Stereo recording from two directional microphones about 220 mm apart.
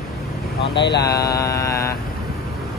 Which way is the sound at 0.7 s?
50° left (ahead or behind).